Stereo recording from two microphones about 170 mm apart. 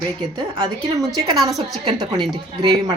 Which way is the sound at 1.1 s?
25° right (ahead or behind).